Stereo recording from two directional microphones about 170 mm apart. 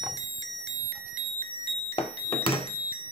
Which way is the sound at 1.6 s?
35° left (ahead or behind).